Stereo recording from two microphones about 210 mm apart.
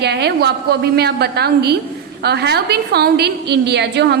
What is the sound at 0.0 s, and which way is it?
A woman's voice, 50° right (ahead or behind).